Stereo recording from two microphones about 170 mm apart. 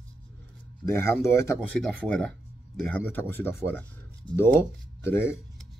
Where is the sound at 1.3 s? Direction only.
15° left (ahead or behind).